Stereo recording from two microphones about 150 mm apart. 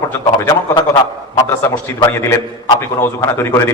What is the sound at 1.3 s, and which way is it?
A man's voice, 20° left (ahead or behind).